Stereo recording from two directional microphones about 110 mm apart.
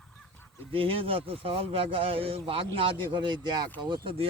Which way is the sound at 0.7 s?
55° right (ahead or behind).